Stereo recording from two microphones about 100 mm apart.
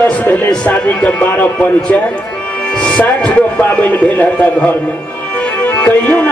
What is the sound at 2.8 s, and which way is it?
Speech, 15° left (ahead or behind).